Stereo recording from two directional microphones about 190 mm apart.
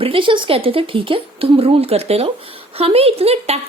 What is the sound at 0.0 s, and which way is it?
A woman's voice, 30° right (ahead or behind).